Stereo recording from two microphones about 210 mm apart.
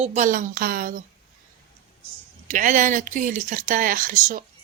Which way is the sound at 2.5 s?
35° right (ahead or behind).